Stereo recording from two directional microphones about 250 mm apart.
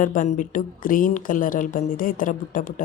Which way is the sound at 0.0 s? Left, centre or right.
Left.